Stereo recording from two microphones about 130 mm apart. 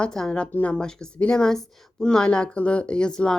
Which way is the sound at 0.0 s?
5° left (ahead or behind).